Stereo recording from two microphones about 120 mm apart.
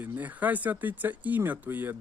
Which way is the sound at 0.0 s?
15° right (ahead or behind).